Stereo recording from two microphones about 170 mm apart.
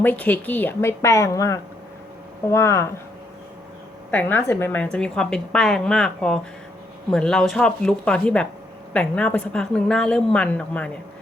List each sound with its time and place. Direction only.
0.0 s a woman's voice: 10° left (ahead or behind)
4.1 s a woman's voice: 10° left (ahead or behind)